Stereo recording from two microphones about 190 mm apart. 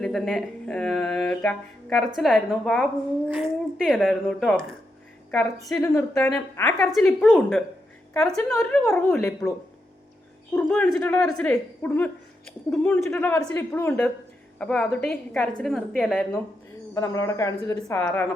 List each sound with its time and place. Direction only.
0.0 s a woman's voice: 5° left (ahead or behind)
6.7 s speech: centre (ahead or behind)
8.8 s a woman's voice: 15° left (ahead or behind)
10.5 s a woman's voice: 10° left (ahead or behind)
16.9 s a woman's voice: 15° left (ahead or behind)